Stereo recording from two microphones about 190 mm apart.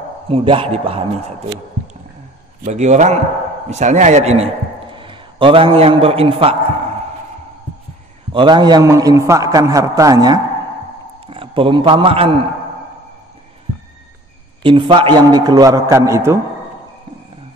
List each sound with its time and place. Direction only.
0.3 s a man's voice: 30° right (ahead or behind)
2.6 s a man's voice: 35° right (ahead or behind)
8.3 s a man's voice: 25° right (ahead or behind)
14.6 s a man's voice: 25° right (ahead or behind)